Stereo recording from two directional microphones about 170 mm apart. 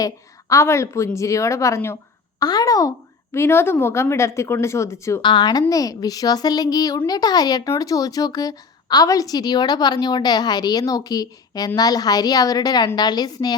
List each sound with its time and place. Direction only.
0.0 s a woman's voice: 20° left (ahead or behind)
5.2 s a woman's voice: 25° left (ahead or behind)